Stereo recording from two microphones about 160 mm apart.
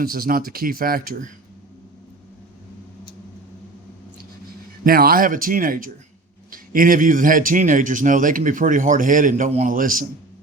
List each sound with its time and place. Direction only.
0.0 s a man's voice: 65° right (ahead or behind)
4.8 s a man's voice: 70° right (ahead or behind)